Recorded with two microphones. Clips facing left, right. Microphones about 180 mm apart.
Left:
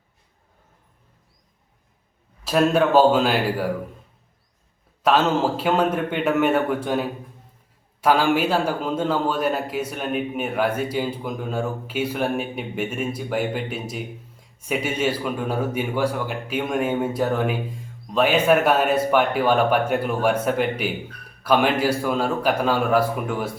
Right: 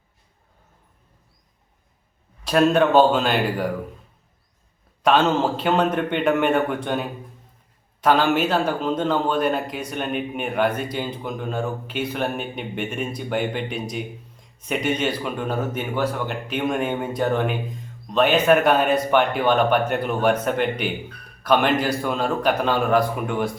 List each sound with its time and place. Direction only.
2.4 s a man's voice: 5° left (ahead or behind)
5.0 s a man's voice: 5° left (ahead or behind)